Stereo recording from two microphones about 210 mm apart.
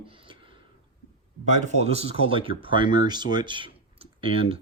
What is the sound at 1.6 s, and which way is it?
Speech, 30° right (ahead or behind).